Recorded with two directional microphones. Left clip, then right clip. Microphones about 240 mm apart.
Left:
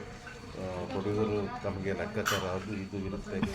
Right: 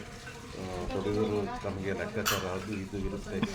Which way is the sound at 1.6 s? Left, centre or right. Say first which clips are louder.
Even; centre.